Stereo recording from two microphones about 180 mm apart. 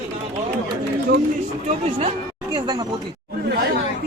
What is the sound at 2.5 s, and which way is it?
Speech, 20° right (ahead or behind).